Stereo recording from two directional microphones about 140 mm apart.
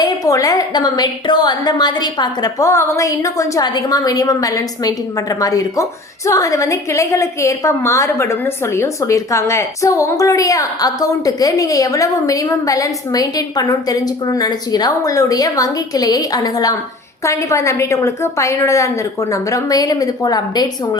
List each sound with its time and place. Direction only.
0.0 s a woman's voice: 25° left (ahead or behind)